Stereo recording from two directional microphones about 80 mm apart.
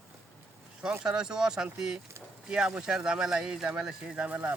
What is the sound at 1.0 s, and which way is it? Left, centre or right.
Speech, centre.